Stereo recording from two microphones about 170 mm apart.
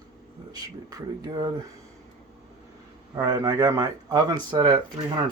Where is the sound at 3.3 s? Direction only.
25° right (ahead or behind).